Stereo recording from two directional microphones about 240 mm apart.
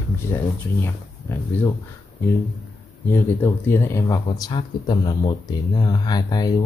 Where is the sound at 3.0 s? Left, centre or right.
Centre.